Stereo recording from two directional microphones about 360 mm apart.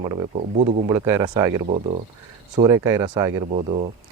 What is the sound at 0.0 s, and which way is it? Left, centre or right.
Speech, centre.